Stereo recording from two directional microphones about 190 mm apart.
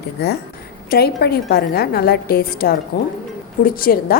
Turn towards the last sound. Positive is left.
turn(degrees=50)  # may be behind; listen again after turning